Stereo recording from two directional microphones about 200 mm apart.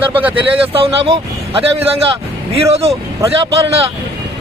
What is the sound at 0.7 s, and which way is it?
Speech, 30° right (ahead or behind).